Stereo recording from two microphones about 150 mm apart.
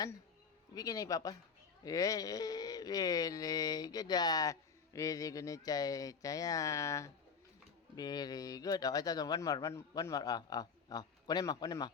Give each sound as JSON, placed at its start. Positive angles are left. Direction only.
{"t": 0.7, "sound": "speech", "side_deg": 25}